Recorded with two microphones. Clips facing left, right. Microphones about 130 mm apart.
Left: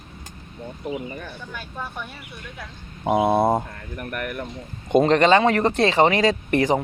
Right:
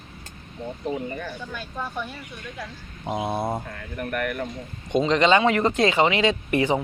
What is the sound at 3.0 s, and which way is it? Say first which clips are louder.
Speech: left 8 dB; 60° left (ahead or behind).